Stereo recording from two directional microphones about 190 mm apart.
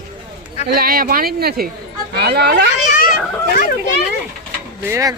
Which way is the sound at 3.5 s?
45° left (ahead or behind).